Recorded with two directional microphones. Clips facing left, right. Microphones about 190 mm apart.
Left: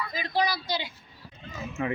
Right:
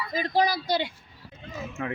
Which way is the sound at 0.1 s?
45° right (ahead or behind).